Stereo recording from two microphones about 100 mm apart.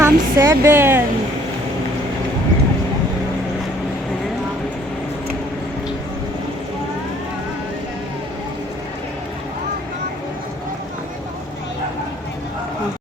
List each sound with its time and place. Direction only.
0.0 s speech: 25° right (ahead or behind)